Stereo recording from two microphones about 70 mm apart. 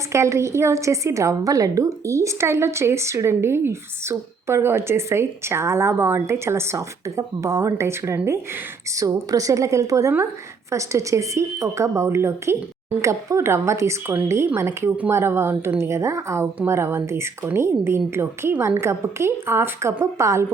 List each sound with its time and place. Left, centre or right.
0.1 s a woman's voice: right
9.0 s a woman's voice: right